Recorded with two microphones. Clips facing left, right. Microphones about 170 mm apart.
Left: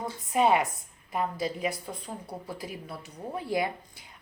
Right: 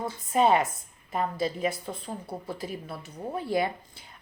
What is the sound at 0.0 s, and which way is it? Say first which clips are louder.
Speech: right 1 dB; 15° left (ahead or behind).